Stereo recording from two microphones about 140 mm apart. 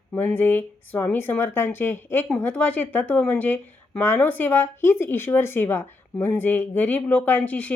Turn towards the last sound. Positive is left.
turn(degrees=10)  # may be behind; listen again after turning